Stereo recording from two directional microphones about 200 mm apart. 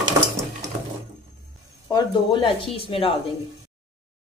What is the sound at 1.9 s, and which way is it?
Speech, 20° left (ahead or behind).